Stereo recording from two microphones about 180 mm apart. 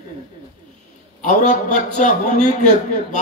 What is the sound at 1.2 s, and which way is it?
A man's voice, 40° left (ahead or behind).